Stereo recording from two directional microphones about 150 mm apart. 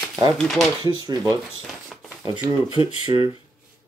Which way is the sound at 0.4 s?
5° left (ahead or behind).